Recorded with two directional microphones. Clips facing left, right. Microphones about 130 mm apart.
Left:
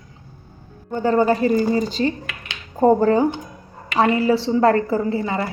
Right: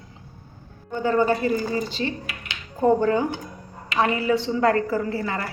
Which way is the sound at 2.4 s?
40° left (ahead or behind).